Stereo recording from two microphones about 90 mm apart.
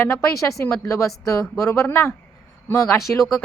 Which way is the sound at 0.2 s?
35° left (ahead or behind).